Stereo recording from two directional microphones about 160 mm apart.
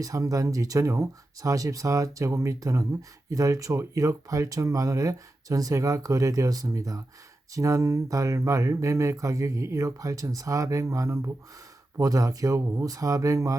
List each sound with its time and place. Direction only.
0.0 s speech: 20° right (ahead or behind)